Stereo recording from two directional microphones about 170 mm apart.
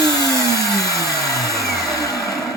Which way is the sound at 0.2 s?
20° left (ahead or behind).